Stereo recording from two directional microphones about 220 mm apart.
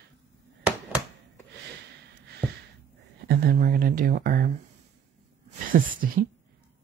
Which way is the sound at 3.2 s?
40° right (ahead or behind).